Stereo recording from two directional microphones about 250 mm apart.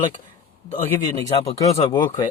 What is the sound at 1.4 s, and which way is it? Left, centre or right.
Speech, left.